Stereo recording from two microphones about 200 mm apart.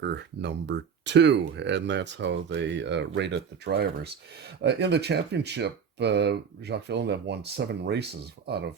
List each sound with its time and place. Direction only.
0.0 s speech: 60° right (ahead or behind)